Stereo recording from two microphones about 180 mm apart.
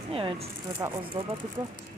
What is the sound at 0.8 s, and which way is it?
Speech, 15° right (ahead or behind).